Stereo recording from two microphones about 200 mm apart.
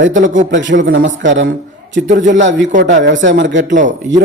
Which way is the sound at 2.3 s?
65° right (ahead or behind).